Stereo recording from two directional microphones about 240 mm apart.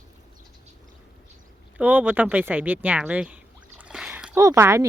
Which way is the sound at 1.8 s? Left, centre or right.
Centre.